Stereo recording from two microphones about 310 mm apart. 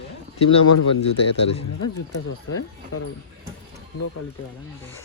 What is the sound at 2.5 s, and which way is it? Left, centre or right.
Speech, left.